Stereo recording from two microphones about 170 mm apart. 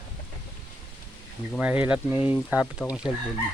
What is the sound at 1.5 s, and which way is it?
Speech, 10° right (ahead or behind).